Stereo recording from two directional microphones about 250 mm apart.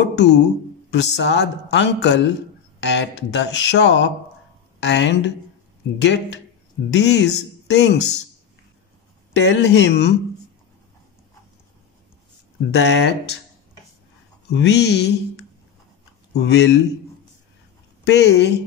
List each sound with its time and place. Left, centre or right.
0.0 s music: left
0.8 s speech: left
9.3 s speech: left
12.7 s speech: left
14.5 s speech: left
18.0 s speech: left